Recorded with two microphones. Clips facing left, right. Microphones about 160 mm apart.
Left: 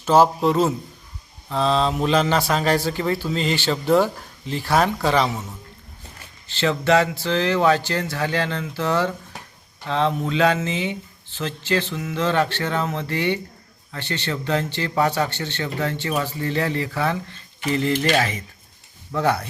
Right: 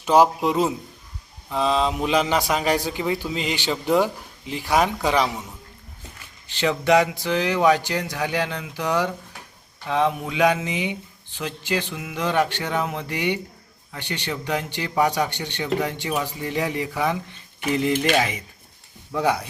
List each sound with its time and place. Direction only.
0.0 s a man's voice: 15° right (ahead or behind)
5.3 s a man's voice: 5° left (ahead or behind)
6.5 s a man's voice: 15° right (ahead or behind)